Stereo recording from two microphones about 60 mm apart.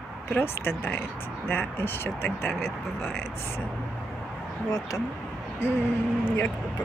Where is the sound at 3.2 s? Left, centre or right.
Left.